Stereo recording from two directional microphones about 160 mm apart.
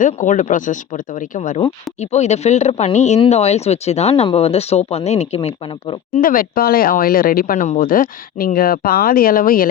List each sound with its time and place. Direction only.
0.0 s speech: 50° left (ahead or behind)
2.0 s speech: 45° left (ahead or behind)
6.1 s speech: 60° left (ahead or behind)